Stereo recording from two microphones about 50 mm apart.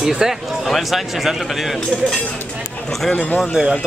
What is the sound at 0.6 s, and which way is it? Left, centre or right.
Speech, centre.